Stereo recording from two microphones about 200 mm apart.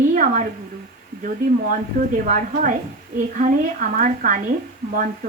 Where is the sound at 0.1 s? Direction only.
40° right (ahead or behind).